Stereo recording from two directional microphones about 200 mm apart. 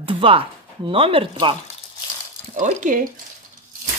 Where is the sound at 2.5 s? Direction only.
40° right (ahead or behind).